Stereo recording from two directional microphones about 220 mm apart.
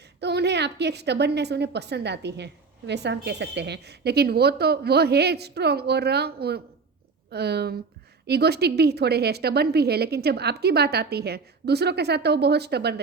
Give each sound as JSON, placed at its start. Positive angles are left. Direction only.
{"t": 0.2, "sound": "a woman's voice", "side_deg": -50}